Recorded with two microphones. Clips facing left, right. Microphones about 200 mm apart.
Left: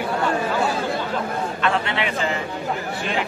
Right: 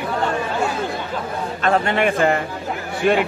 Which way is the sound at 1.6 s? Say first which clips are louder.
Right 7 dB; 45° right (ahead or behind).